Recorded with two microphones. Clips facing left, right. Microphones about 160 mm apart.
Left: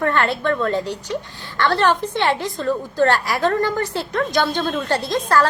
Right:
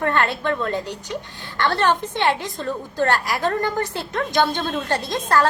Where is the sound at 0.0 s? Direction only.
15° right (ahead or behind).